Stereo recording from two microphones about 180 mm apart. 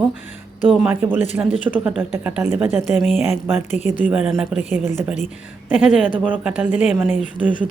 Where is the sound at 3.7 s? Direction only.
40° left (ahead or behind).